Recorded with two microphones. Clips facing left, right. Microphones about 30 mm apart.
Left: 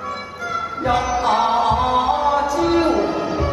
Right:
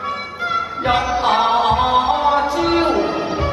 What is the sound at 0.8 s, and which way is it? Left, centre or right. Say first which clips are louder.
Music: right 1 dB; right.